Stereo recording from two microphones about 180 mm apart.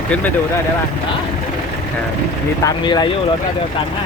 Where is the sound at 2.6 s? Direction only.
25° left (ahead or behind).